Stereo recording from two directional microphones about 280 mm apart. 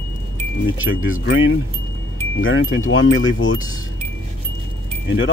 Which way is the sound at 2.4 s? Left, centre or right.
Left.